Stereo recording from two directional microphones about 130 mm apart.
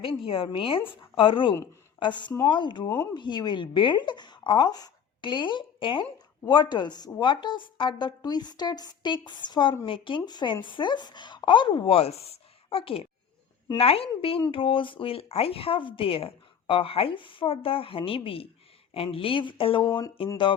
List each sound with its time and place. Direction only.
0.3 s speech: 45° left (ahead or behind)